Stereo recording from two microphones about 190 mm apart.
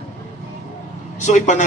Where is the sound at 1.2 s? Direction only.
40° left (ahead or behind).